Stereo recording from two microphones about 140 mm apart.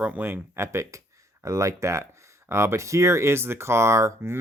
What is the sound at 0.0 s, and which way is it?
Speech, 10° right (ahead or behind).